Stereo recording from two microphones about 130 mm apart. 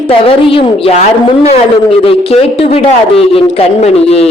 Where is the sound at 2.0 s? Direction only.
45° left (ahead or behind).